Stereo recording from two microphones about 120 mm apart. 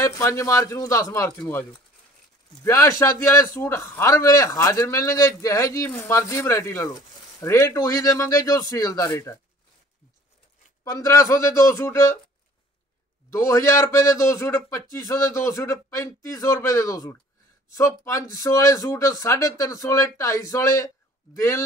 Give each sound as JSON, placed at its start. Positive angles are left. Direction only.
{"t": 0.0, "sound": "a man's voice", "side_deg": 25}
{"t": 2.6, "sound": "a man's voice", "side_deg": 25}
{"t": 10.8, "sound": "a man's voice", "side_deg": 30}
{"t": 13.3, "sound": "a man's voice", "side_deg": 25}